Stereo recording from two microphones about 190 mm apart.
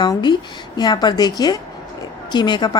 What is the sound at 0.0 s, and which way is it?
A woman's voice, 20° left (ahead or behind).